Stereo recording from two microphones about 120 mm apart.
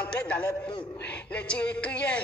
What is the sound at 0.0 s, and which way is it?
A man's voice, 10° left (ahead or behind).